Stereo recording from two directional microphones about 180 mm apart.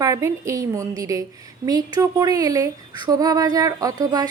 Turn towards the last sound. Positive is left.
turn(degrees=-20)  # may be behind; listen again after turning